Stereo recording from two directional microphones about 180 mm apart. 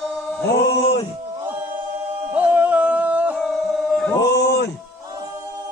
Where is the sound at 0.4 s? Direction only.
65° left (ahead or behind).